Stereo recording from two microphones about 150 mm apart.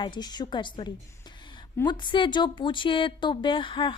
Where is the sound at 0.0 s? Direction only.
30° left (ahead or behind).